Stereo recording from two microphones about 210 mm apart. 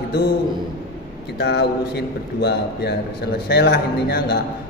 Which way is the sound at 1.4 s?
55° left (ahead or behind).